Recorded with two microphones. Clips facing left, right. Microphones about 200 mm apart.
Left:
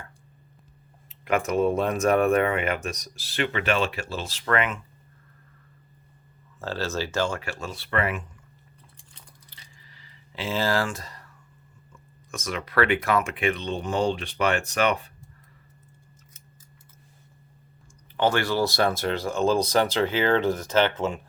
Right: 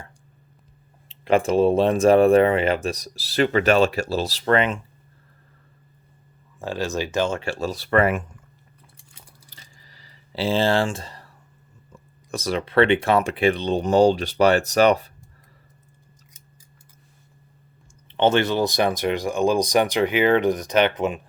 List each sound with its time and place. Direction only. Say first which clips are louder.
1.0 s speech: right 6 dB; 30° right (ahead or behind)
6.6 s speech: right 3 dB; 15° right (ahead or behind); by 8.4 s 45° right (ahead or behind)
9.5 s a sound: right 2 dB; 40° right (ahead or behind)
11.9 s speech: right 7 dB; 35° right (ahead or behind)
18.1 s speech: right 4 dB; 25° right (ahead or behind)